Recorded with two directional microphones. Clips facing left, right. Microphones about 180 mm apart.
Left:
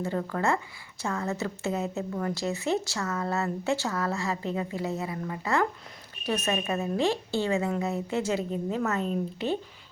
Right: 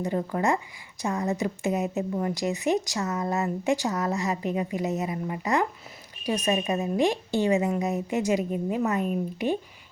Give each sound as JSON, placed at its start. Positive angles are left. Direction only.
{"t": 0.0, "sound": "a woman's voice", "side_deg": -15}